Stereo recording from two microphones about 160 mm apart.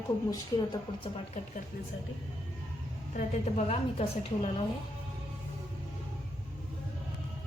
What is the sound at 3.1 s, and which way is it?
A woman's voice, 45° left (ahead or behind).